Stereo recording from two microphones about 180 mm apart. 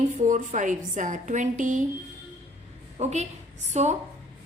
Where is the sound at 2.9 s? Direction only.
40° right (ahead or behind).